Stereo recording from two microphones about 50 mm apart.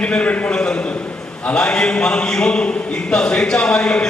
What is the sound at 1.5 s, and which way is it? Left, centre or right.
Speech, centre.